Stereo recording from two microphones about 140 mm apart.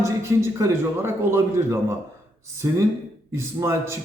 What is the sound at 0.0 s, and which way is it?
A man's voice, 20° right (ahead or behind).